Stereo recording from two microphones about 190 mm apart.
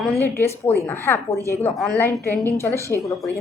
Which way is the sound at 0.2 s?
10° left (ahead or behind).